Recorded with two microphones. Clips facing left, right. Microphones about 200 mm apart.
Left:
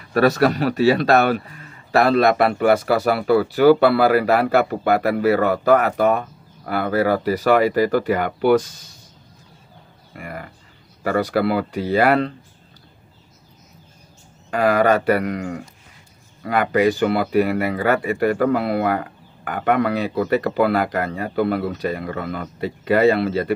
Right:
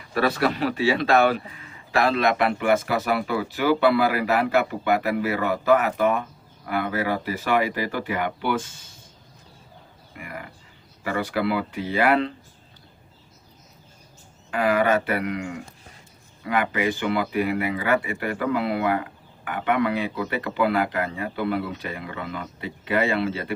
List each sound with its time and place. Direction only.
0.1 s speech: 40° left (ahead or behind)
10.1 s speech: 45° left (ahead or behind)
14.5 s speech: 40° left (ahead or behind)